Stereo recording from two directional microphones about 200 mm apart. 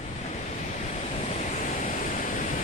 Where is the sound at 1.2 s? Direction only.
35° left (ahead or behind).